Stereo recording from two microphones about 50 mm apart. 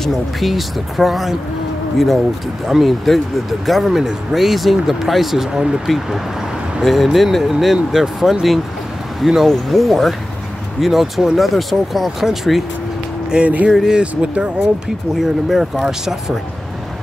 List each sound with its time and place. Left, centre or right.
0.0 s speech: centre
2.6 s speech: centre
5.9 s speech: centre
13.3 s speech: right
13.7 s speech: centre
15.1 s speech: centre